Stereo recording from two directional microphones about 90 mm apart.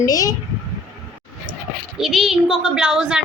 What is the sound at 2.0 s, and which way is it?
A woman's voice, 5° right (ahead or behind).